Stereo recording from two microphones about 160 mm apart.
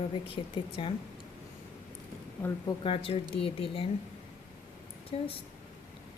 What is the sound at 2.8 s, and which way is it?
Speech, 35° left (ahead or behind).